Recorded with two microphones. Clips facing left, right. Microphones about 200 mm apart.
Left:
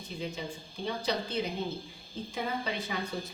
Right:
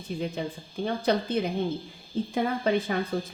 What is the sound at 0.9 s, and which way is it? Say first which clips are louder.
A woman's voice: right 7 dB; 55° right (ahead or behind).